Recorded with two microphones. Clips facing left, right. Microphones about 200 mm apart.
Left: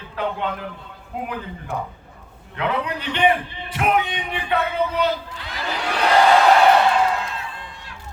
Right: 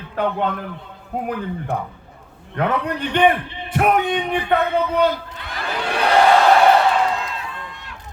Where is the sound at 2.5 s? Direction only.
50° right (ahead or behind).